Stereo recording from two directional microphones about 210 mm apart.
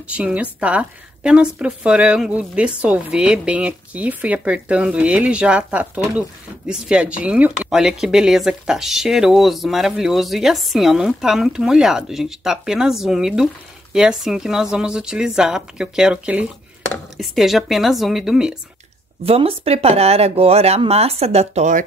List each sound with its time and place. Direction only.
0.1 s speech: 5° right (ahead or behind)
19.2 s speech: 30° right (ahead or behind)